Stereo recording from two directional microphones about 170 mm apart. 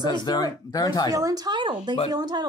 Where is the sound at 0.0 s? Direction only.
25° left (ahead or behind).